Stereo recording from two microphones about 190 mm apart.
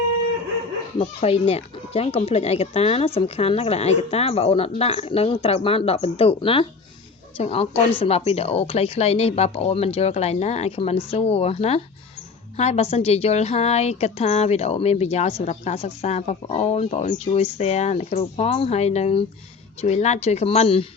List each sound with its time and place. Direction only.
0.9 s a woman's voice: 30° left (ahead or behind)